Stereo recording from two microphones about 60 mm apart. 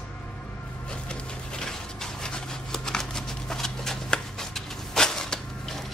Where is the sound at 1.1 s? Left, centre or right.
Centre.